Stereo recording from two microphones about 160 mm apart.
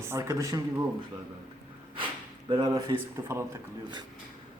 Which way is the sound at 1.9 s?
30° right (ahead or behind).